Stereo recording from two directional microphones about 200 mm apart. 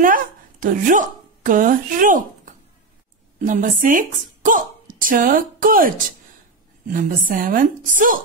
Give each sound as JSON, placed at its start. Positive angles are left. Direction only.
{"t": 0.0, "sound": "a woman's voice", "side_deg": -40}